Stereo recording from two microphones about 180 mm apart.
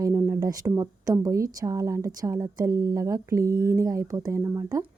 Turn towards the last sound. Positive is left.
turn(degrees=-15)  # may be behind; listen again after turning